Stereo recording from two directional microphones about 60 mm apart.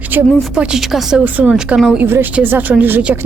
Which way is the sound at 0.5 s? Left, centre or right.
Centre.